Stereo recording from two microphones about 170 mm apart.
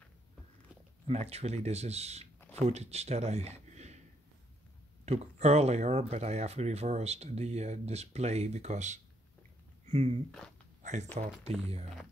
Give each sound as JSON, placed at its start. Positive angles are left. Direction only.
{"t": 1.0, "sound": "speech", "side_deg": -40}
{"t": 5.0, "sound": "speech", "side_deg": -40}
{"t": 10.8, "sound": "typing", "side_deg": -45}
{"t": 11.4, "sound": "speech", "side_deg": -40}